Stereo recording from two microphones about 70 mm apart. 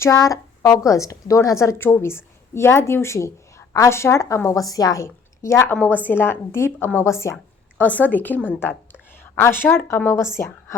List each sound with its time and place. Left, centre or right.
0.0 s a woman's voice: left
1.8 s a woman's voice: left
5.0 s a woman's voice: left
5.7 s a woman's voice: left
7.8 s a woman's voice: left